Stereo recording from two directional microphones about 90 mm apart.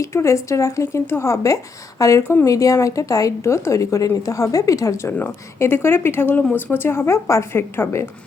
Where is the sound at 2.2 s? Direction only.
25° left (ahead or behind).